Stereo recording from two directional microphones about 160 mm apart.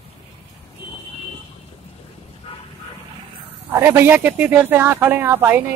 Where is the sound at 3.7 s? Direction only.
15° right (ahead or behind).